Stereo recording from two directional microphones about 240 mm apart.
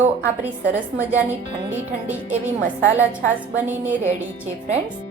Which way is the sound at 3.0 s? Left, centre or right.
Centre.